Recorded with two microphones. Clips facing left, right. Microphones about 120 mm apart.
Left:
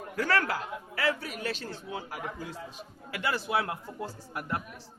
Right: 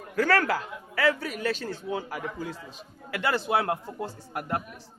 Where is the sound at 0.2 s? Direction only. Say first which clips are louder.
Right 5 dB; 90° right.